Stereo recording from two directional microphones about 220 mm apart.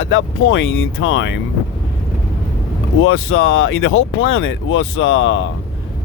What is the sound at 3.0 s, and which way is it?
Speech, 65° left (ahead or behind).